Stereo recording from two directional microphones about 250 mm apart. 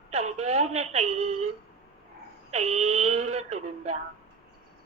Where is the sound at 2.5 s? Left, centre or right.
Right.